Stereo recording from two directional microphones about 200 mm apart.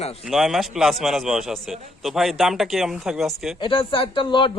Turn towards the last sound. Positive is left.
turn(degrees=25)  # may be behind; listen again after turning